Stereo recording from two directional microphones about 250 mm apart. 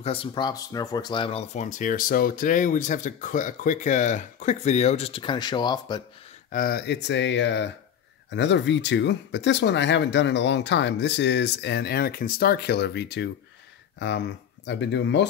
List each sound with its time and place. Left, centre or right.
0.0 s speech: left
6.5 s speech: left